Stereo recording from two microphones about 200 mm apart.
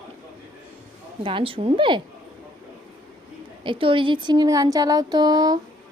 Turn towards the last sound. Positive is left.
turn(degrees=-20)  # may be behind; listen again after turning